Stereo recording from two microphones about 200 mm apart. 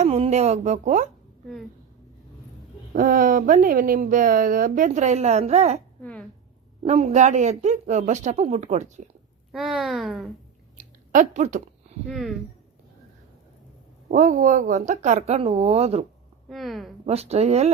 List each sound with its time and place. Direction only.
0.0 s speech: 35° right (ahead or behind)
2.9 s speech: 45° right (ahead or behind)
6.0 s speech: 5° left (ahead or behind)
6.8 s speech: 35° right (ahead or behind)
9.5 s speech: centre (ahead or behind)
10.8 s chewing: 40° right (ahead or behind)
12.0 s speech: centre (ahead or behind)
14.1 s speech: 40° right (ahead or behind)
16.5 s speech: centre (ahead or behind)
17.1 s speech: 30° right (ahead or behind)